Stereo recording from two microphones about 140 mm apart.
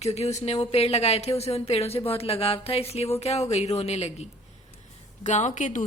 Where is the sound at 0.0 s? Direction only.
50° left (ahead or behind).